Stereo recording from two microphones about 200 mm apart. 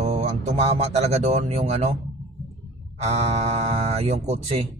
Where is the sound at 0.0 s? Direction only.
35° right (ahead or behind).